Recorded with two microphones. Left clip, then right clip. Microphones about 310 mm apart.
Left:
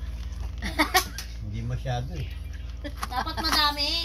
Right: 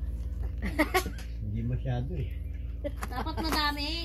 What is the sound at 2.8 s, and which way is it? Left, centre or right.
Speech, centre.